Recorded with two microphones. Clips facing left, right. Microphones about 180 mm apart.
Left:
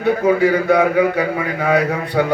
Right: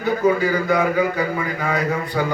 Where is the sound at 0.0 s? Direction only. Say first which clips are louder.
Left 4 dB; 65° left (ahead or behind).